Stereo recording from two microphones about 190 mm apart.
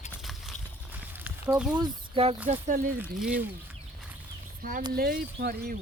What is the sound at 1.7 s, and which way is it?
Speech, 25° right (ahead or behind).